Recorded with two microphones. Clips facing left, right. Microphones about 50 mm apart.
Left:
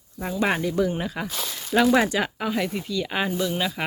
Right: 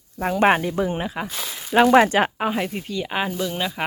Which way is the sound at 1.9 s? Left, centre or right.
Right.